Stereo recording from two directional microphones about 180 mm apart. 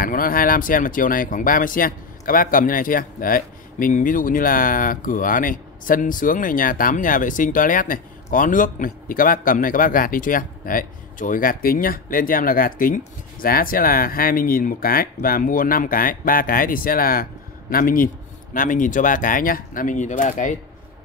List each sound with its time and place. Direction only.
0.0 s speech: 50° left (ahead or behind)